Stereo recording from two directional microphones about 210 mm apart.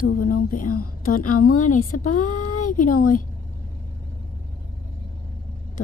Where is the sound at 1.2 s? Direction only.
90° left.